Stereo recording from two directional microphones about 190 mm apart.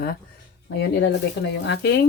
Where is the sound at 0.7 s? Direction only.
70° left (ahead or behind).